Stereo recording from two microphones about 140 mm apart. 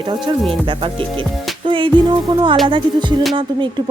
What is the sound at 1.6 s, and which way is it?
Music, 35° right (ahead or behind).